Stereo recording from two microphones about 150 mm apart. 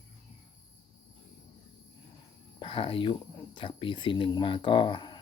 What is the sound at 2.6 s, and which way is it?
Speech, 35° left (ahead or behind).